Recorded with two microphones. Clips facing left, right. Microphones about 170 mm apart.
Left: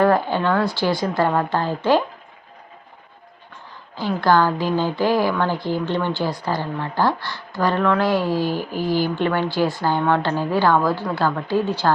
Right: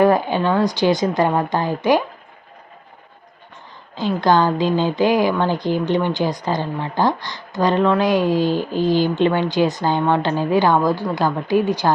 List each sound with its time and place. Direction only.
0.0 s a woman's voice: 15° right (ahead or behind)
3.9 s a woman's voice: 20° right (ahead or behind)